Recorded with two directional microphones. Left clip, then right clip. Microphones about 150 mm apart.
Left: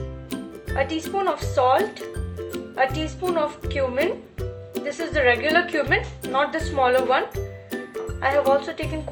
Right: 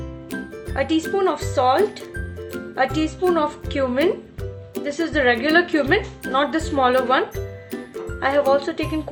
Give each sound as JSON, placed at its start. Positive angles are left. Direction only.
{"t": 0.8, "sound": "speech", "side_deg": -20}
{"t": 7.3, "sound": "music", "side_deg": 0}
{"t": 8.2, "sound": "speech", "side_deg": -20}